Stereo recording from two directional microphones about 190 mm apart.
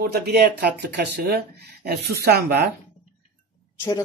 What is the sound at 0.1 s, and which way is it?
Speech, 55° right (ahead or behind).